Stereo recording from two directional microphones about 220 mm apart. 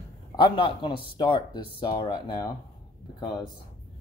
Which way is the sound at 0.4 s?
20° left (ahead or behind).